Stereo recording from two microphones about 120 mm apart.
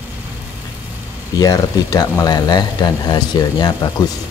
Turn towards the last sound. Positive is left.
turn(degrees=35)  # may be behind; listen again after turning